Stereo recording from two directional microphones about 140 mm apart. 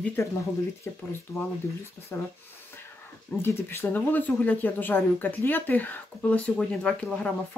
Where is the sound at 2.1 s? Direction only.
15° left (ahead or behind).